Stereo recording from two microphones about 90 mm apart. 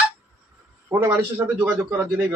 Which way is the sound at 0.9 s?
30° right (ahead or behind).